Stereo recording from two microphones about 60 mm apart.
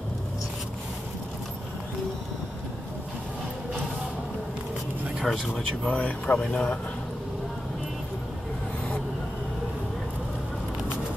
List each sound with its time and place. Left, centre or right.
5.2 s speech: centre
5.9 s speech: centre